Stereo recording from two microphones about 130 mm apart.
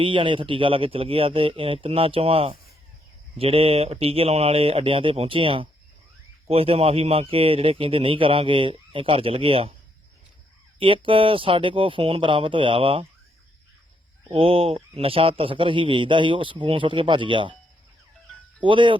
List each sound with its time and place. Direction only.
0.0 s speech: 40° right (ahead or behind)
10.8 s speech: 40° right (ahead or behind)
14.3 s speech: 45° right (ahead or behind)
18.6 s speech: 40° right (ahead or behind)